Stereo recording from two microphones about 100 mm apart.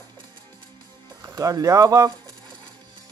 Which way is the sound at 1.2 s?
35° right (ahead or behind).